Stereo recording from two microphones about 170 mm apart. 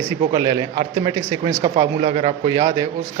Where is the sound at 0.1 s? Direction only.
20° right (ahead or behind).